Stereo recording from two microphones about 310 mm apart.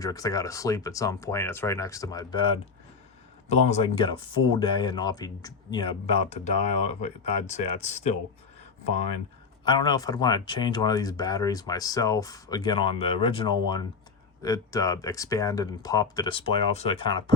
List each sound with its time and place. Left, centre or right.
0.0 s speech: centre
9.6 s speech: centre